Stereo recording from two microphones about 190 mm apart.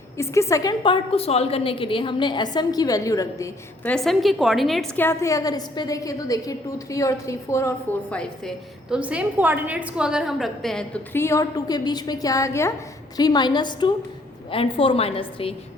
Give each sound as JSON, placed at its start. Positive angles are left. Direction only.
{"t": 0.2, "sound": "a woman's voice", "side_deg": 15}
{"t": 3.9, "sound": "a woman's voice", "side_deg": 0}
{"t": 5.0, "sound": "a woman's voice", "side_deg": 15}
{"t": 8.1, "sound": "a woman's voice", "side_deg": 5}